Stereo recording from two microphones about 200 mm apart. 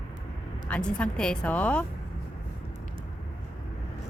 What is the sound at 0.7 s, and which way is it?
Speech, 5° left (ahead or behind).